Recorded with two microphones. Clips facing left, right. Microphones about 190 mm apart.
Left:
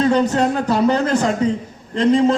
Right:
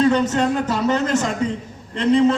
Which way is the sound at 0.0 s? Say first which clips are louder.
Left 1 dB; 40° left (ahead or behind).